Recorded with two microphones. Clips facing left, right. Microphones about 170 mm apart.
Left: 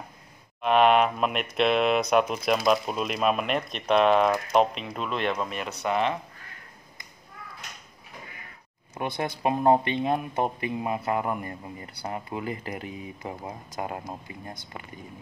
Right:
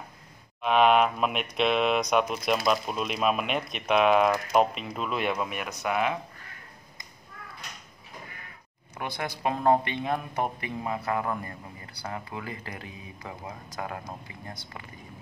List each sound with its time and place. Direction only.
0.6 s speech: centre (ahead or behind)
8.9 s speech: 25° left (ahead or behind)